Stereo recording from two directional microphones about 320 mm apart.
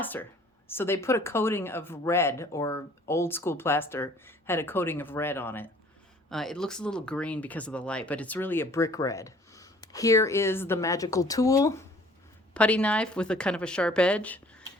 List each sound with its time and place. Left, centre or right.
0.0 s speech: centre